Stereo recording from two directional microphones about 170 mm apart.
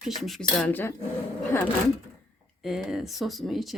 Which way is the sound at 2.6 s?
Centre (ahead or behind).